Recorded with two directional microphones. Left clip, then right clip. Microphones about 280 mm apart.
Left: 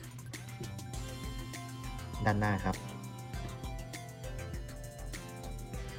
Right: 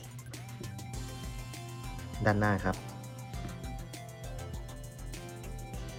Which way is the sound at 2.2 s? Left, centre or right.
Centre.